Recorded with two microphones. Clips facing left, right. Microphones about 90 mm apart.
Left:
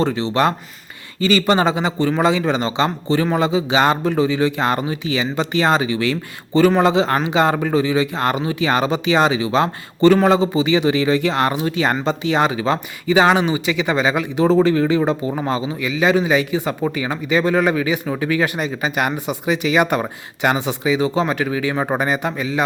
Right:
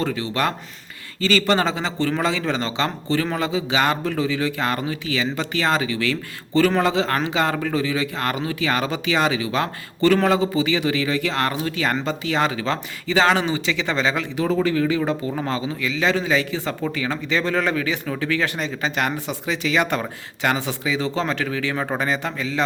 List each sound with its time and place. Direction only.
0.0 s a man's voice: 25° left (ahead or behind)
14.4 s a man's voice: 30° left (ahead or behind)